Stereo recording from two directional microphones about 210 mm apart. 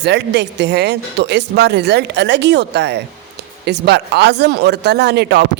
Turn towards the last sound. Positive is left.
turn(degrees=-55)  # may be behind; listen again after turning